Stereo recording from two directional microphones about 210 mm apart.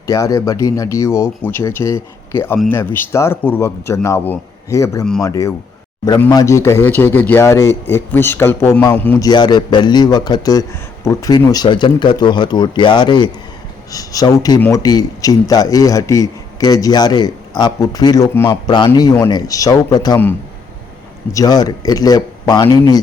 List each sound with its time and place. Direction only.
0.1 s speech: 15° left (ahead or behind)
21.3 s a man's voice: 20° left (ahead or behind)